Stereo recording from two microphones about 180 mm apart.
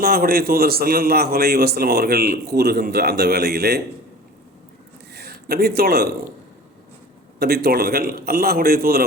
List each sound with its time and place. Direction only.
0.0 s a man's voice: 55° right (ahead or behind)
5.1 s speech: 60° right (ahead or behind)
7.3 s a man's voice: 60° right (ahead or behind)